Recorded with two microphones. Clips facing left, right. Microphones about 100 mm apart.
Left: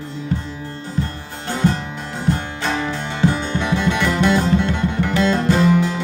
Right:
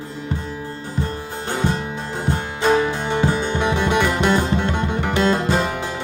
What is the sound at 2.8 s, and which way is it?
Music, 15° right (ahead or behind).